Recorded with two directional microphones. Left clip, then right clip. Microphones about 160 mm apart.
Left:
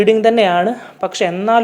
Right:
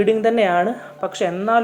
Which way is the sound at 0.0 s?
30° left (ahead or behind).